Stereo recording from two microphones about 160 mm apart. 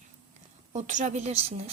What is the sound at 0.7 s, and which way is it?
Speech, 50° right (ahead or behind).